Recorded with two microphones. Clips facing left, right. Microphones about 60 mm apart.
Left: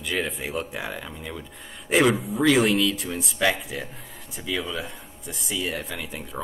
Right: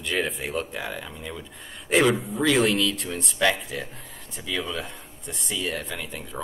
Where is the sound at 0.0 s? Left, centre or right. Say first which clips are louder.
Right 1 dB; centre.